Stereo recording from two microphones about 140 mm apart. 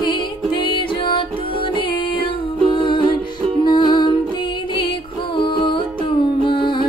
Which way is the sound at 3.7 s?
30° left (ahead or behind).